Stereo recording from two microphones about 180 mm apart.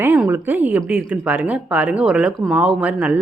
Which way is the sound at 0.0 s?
10° right (ahead or behind).